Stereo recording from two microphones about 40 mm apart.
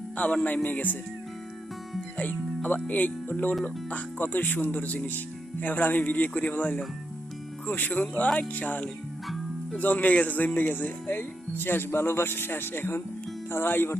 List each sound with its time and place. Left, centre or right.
0.4 s speech: left
2.1 s speech: left